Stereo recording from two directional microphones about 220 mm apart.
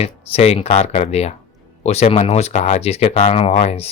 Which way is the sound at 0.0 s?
30° left (ahead or behind).